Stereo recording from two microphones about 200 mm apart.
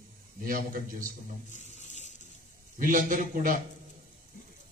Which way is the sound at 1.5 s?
35° left (ahead or behind).